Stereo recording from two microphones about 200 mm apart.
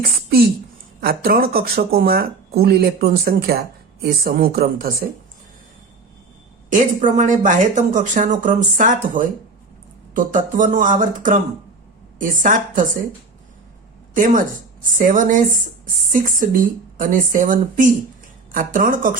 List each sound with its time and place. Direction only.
0.3 s speech: 50° right (ahead or behind)
6.7 s speech: 40° right (ahead or behind)
14.2 s speech: 40° right (ahead or behind)